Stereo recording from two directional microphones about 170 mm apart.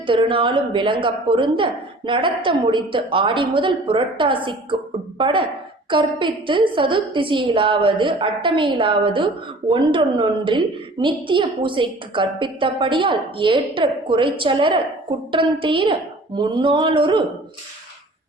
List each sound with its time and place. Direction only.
0.0 s a woman's voice: 30° right (ahead or behind)